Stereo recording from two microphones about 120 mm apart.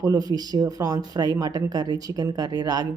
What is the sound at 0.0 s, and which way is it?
A woman's voice, 30° right (ahead or behind).